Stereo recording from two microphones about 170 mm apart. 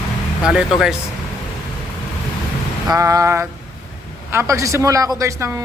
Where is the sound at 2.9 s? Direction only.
20° right (ahead or behind).